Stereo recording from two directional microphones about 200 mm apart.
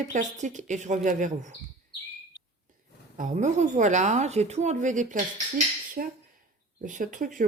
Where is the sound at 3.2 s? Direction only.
35° right (ahead or behind).